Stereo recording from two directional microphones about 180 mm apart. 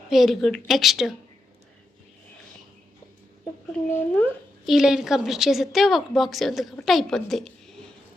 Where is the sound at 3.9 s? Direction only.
10° left (ahead or behind).